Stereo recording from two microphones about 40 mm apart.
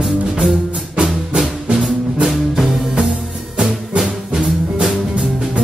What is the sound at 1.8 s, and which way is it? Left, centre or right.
Music, centre.